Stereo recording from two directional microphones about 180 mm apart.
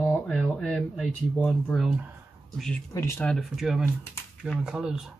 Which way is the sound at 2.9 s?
15° left (ahead or behind).